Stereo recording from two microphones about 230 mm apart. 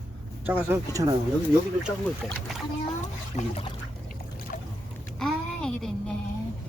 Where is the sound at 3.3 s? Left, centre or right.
Left.